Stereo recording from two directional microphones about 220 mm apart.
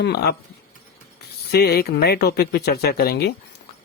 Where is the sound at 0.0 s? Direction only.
45° left (ahead or behind).